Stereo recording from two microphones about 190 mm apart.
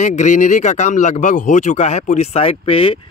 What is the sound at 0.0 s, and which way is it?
Speech, 40° left (ahead or behind).